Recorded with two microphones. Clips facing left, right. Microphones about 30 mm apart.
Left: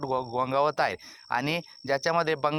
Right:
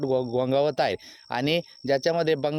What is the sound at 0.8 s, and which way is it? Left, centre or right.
Speech, right.